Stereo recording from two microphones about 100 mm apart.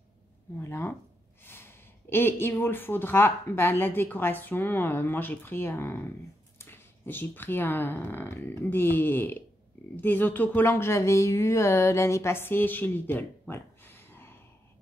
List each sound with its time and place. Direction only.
0.6 s speech: 25° left (ahead or behind)